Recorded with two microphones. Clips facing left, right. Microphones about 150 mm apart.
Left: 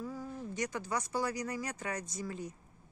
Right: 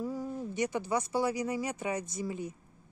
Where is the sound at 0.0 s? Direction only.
25° right (ahead or behind).